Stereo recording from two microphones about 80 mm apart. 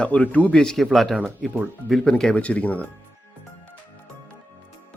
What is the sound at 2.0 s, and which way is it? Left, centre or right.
Speech, centre.